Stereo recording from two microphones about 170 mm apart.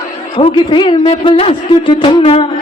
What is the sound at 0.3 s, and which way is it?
Speech, 30° left (ahead or behind).